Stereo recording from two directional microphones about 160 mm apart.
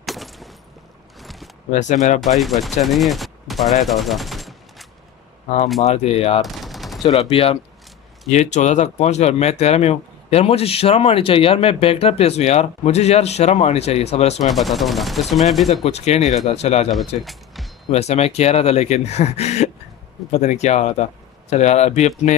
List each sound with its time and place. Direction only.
0.0 s keys jangling: centre (ahead or behind)
1.2 s a sound: centre (ahead or behind)
1.7 s speech: 50° left (ahead or behind)
2.3 s speech: centre (ahead or behind)
3.8 s fusillade: centre (ahead or behind)
5.9 s speech: 40° left (ahead or behind)
6.4 s machine gun: centre (ahead or behind)
7.1 s speech: 35° left (ahead or behind)
8.3 s speech: 50° left (ahead or behind)
14.4 s speech: centre (ahead or behind)
15.8 s speech: 40° left (ahead or behind)
17.2 s music: centre (ahead or behind)
17.9 s speech: 40° left (ahead or behind)